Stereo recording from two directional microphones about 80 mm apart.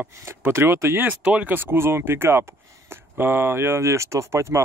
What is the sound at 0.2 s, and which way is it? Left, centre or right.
Speech, right.